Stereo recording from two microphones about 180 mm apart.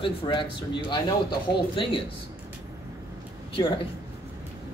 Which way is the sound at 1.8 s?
30° left (ahead or behind).